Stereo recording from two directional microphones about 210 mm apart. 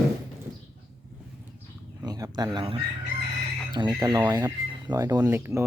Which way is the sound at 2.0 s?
20° right (ahead or behind).